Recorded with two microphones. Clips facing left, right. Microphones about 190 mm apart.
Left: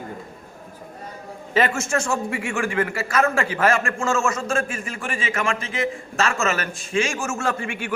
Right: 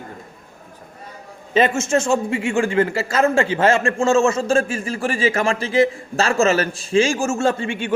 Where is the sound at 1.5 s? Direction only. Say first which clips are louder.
Right 4 dB; 20° right (ahead or behind).